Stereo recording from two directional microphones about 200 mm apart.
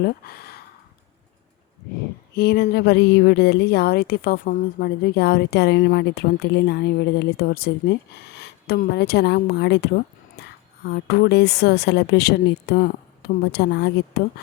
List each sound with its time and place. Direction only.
0.0 s speech: 50° left (ahead or behind)
2.3 s a woman's voice: 50° left (ahead or behind)